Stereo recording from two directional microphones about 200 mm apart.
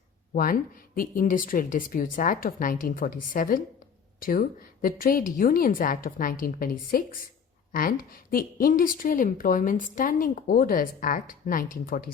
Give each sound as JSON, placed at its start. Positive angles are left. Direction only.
{"t": 0.3, "sound": "a woman's voice", "side_deg": 45}